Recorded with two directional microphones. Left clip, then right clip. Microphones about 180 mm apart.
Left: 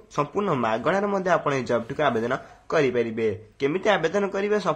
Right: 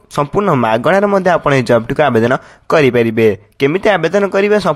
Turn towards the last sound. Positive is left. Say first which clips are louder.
# right 12 dB
turn(degrees=-45)  # may be behind; listen again after turning